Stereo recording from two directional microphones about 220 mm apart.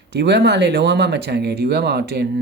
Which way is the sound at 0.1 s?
50° right (ahead or behind).